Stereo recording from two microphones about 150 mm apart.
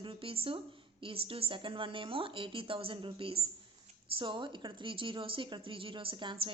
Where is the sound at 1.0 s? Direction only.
40° right (ahead or behind).